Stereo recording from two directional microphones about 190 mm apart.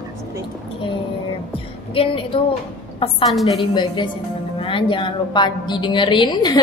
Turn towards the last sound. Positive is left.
turn(degrees=25)  # may be behind; listen again after turning